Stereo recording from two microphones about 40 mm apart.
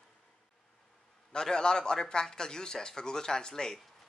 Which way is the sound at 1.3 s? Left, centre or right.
Centre.